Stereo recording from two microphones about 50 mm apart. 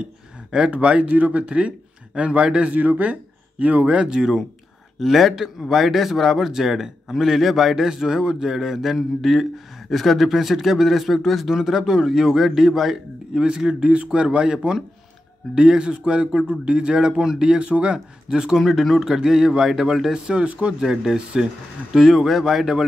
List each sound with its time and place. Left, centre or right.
0.0 s a man's voice: right
2.7 s speech: right
5.0 s a man's voice: centre
13.4 s speech: centre
18.6 s speech: centre